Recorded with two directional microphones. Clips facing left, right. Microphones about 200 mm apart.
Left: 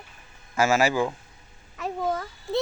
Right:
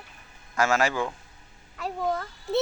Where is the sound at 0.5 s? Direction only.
5° left (ahead or behind).